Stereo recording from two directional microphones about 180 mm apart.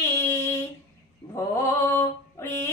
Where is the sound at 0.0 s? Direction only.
15° left (ahead or behind).